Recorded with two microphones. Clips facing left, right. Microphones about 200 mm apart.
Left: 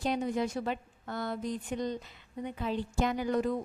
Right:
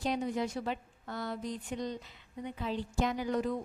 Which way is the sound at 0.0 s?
55° left (ahead or behind).